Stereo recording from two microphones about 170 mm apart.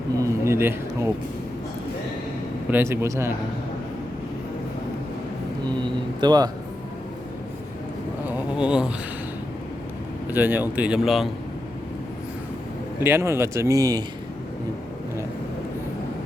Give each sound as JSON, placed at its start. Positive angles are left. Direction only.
{"t": 0.2, "sound": "a sound", "side_deg": -15}
{"t": 2.6, "sound": "speech", "side_deg": -10}
{"t": 5.6, "sound": "speech", "side_deg": -25}
{"t": 8.3, "sound": "a sound", "side_deg": -5}
{"t": 10.2, "sound": "speech", "side_deg": -10}
{"t": 13.0, "sound": "speech", "side_deg": -15}